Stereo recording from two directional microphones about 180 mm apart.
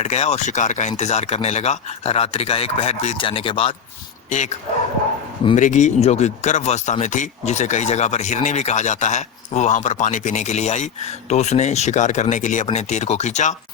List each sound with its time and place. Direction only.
0.0 s speech: 35° left (ahead or behind)
4.3 s speech: 40° left (ahead or behind)
5.5 s speech: 40° left (ahead or behind)